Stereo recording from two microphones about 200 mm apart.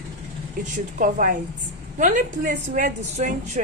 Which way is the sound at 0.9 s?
40° right (ahead or behind).